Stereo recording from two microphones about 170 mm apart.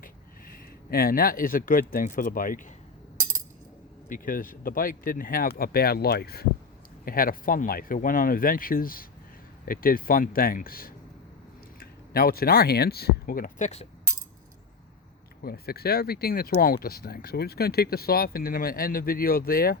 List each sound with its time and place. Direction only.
0.0 s speech: 60° left (ahead or behind)
4.1 s speech: 55° left (ahead or behind)
15.4 s speech: 65° left (ahead or behind)